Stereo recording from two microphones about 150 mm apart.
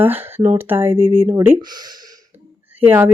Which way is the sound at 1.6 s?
25° right (ahead or behind).